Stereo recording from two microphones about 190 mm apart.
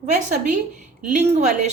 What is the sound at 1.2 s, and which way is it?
Speech, 35° right (ahead or behind).